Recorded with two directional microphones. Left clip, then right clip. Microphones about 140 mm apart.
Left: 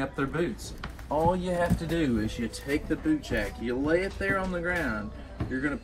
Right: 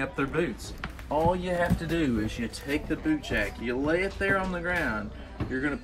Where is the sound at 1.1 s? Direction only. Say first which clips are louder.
Even; 5° left (ahead or behind).